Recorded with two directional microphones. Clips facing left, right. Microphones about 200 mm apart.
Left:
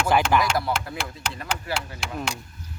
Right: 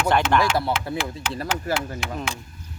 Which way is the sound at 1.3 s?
40° right (ahead or behind).